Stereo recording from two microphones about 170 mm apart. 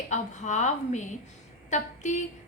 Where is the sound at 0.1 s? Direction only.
45° left (ahead or behind).